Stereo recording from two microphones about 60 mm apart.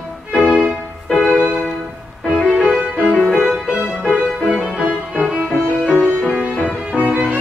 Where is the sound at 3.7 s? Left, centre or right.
Centre.